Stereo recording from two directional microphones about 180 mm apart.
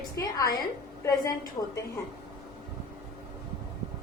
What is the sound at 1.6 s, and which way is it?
Speech, 20° left (ahead or behind).